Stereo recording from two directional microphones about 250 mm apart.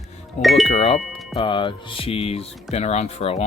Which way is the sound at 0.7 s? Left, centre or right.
Left.